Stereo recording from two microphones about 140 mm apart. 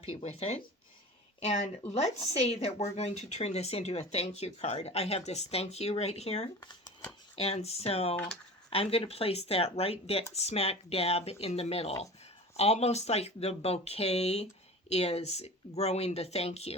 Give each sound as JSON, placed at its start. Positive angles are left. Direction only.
{"t": 0.0, "sound": "speech", "side_deg": 45}